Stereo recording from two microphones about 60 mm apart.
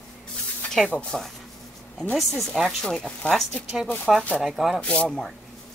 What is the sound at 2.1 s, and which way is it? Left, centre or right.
Speech, centre.